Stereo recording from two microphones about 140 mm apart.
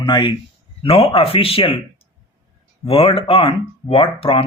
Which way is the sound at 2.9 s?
40° left (ahead or behind).